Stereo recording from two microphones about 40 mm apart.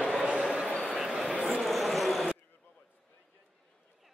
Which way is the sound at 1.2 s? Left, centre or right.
Right.